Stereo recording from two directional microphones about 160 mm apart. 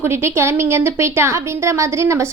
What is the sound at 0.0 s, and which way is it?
A woman's voice, 15° right (ahead or behind).